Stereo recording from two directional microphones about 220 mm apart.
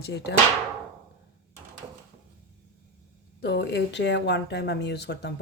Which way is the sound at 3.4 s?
50° left (ahead or behind).